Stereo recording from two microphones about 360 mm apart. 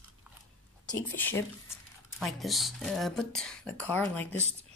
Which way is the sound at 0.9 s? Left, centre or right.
Centre.